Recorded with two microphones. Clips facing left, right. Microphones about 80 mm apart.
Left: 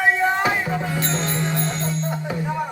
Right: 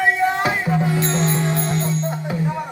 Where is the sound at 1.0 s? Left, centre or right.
Centre.